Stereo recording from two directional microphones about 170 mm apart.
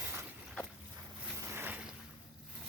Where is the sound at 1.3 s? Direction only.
15° right (ahead or behind).